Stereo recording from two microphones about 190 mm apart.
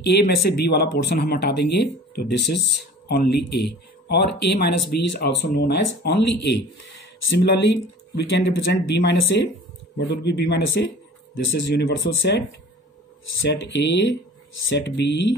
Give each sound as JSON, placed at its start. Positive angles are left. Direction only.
{"t": 0.1, "sound": "speech", "side_deg": 55}